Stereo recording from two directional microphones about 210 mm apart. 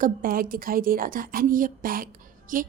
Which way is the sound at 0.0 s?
40° right (ahead or behind).